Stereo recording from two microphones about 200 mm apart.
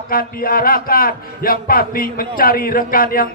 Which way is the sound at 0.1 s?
45° left (ahead or behind).